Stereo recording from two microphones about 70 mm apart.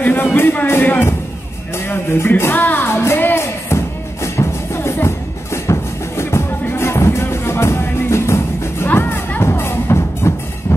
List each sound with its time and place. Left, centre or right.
0.0 s a sound: left
0.4 s music: left
8.8 s music: left